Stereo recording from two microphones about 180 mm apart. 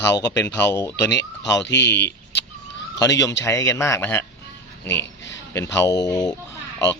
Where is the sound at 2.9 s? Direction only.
20° left (ahead or behind).